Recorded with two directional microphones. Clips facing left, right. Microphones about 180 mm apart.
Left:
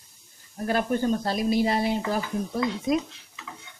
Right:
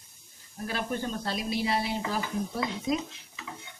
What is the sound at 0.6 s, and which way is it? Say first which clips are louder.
Speech: left 8 dB; 45° left (ahead or behind).